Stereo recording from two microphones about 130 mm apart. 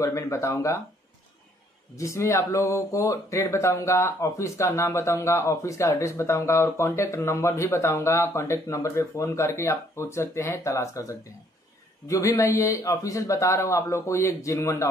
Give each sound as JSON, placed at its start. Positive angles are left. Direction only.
{"t": 0.0, "sound": "speech", "side_deg": 20}
{"t": 2.0, "sound": "speech", "side_deg": 25}